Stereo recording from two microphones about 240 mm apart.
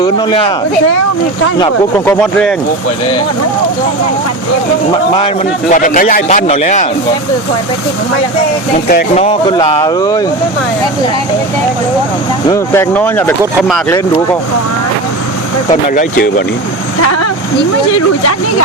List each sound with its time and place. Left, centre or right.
0.0 s speech: left
1.5 s speech: centre
5.1 s a man's voice: left
8.9 s a man's voice: left
9.2 s speech: left
12.5 s speech: centre
15.7 s a man's voice: left
17.0 s vehicle: left